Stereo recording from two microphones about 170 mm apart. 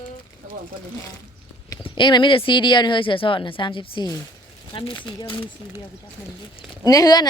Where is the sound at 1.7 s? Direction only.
25° left (ahead or behind).